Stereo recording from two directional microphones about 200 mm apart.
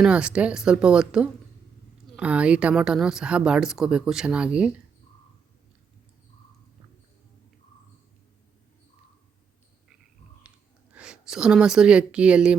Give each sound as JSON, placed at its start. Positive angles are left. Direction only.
{"t": 0.0, "sound": "speech", "side_deg": -5}
{"t": 10.9, "sound": "a woman's voice", "side_deg": -5}